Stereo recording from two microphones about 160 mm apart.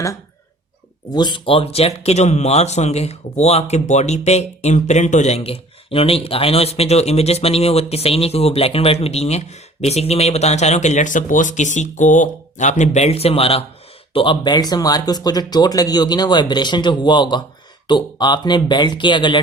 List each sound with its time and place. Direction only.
1.1 s speech: 30° left (ahead or behind)